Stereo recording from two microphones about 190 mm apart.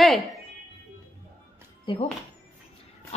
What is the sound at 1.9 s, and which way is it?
Speech, 25° left (ahead or behind).